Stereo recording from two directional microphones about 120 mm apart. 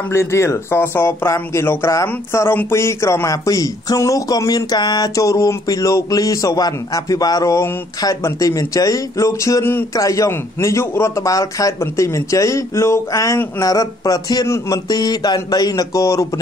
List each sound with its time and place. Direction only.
0.1 s speech: 20° left (ahead or behind)